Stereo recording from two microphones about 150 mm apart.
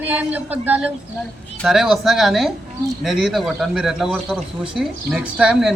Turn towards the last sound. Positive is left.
turn(degrees=-5)  # may be behind; listen again after turning